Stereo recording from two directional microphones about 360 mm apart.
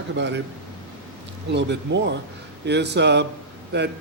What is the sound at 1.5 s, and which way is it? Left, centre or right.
A man's voice, right.